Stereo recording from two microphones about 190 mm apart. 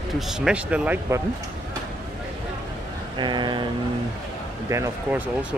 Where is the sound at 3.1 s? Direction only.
25° right (ahead or behind).